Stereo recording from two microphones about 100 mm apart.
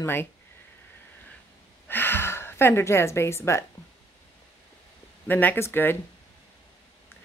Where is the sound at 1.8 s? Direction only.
20° left (ahead or behind).